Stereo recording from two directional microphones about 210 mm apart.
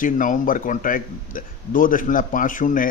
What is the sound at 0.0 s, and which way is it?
A man's voice, 40° left (ahead or behind).